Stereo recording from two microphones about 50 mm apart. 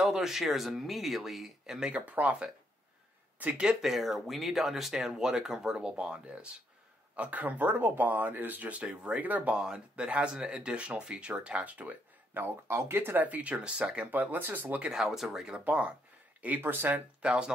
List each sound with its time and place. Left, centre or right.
0.0 s speech: centre
1.9 s speech: right
3.8 s speech: centre; by 9.5 s right
9.5 s speech: centre
12.6 s speech: right
14.9 s speech: centre
15.6 s speech: right
17.2 s speech: centre